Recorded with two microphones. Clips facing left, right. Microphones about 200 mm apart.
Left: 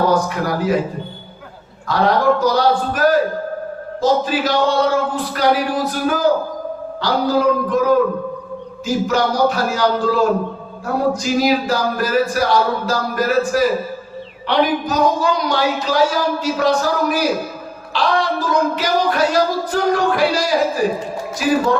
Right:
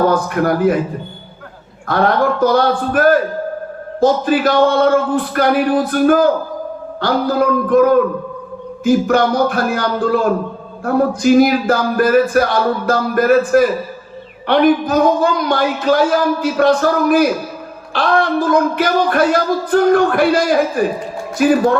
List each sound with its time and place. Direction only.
0.1 s a man's voice: 55° right (ahead or behind)
1.9 s speech: 55° right (ahead or behind)